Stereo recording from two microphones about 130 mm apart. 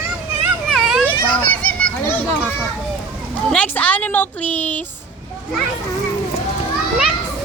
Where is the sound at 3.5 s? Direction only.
10° left (ahead or behind).